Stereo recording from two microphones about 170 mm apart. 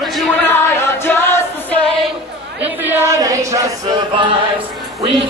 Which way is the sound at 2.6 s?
10° right (ahead or behind).